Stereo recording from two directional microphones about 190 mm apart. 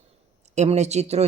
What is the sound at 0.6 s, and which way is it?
Speech, 35° right (ahead or behind).